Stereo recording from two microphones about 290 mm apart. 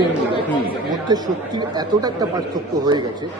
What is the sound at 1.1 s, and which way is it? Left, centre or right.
A man's voice, centre.